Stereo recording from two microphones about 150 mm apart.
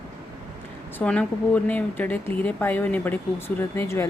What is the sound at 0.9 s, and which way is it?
A woman's voice, 10° left (ahead or behind).